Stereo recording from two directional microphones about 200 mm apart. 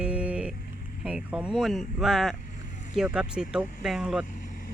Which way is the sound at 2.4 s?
40° left (ahead or behind).